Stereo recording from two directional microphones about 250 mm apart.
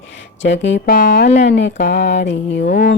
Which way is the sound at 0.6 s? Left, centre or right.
Left.